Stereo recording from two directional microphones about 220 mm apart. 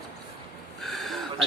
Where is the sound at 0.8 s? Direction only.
Centre (ahead or behind).